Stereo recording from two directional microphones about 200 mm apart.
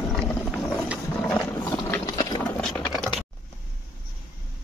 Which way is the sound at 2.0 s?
20° left (ahead or behind).